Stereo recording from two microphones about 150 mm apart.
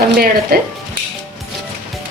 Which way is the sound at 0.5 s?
80° right.